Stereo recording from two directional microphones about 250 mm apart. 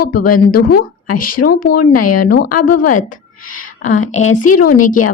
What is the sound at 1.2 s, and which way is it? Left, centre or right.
A woman's voice, left.